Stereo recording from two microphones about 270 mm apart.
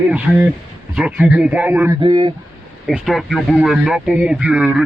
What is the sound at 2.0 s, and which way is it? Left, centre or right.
Speech, centre.